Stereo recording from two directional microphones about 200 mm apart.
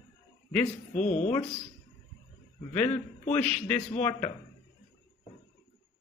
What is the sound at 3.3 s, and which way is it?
Speech, 10° left (ahead or behind).